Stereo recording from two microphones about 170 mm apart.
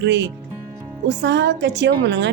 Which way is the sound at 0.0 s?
90° right.